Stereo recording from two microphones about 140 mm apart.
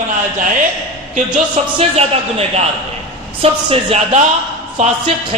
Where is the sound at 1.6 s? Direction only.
55° right (ahead or behind).